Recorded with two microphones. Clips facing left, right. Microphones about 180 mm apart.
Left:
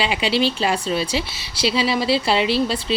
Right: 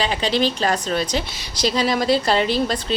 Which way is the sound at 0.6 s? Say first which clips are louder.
Even; 5° left (ahead or behind).